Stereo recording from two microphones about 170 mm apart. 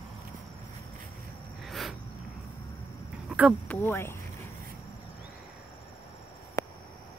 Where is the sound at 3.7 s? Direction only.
15° left (ahead or behind).